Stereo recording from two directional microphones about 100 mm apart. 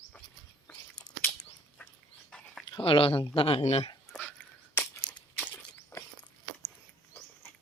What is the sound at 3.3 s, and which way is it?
Speech, 70° left (ahead or behind).